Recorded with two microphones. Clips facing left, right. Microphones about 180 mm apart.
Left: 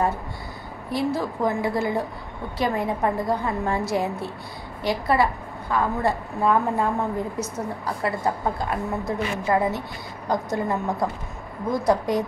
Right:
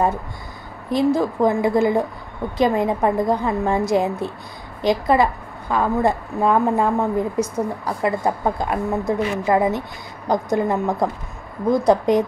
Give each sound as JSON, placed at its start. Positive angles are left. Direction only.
{"t": 0.8, "sound": "a woman's voice", "side_deg": -20}